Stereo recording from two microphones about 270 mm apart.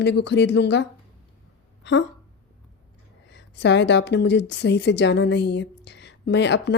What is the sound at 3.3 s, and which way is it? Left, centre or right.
A woman's voice, left.